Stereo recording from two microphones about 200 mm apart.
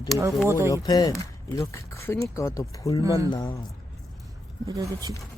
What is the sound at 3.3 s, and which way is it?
Speech, 20° left (ahead or behind).